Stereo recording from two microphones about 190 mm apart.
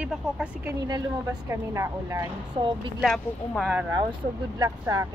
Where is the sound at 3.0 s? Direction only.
Centre (ahead or behind).